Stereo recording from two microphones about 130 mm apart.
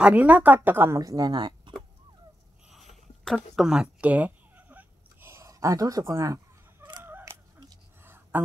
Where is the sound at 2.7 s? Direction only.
Centre (ahead or behind).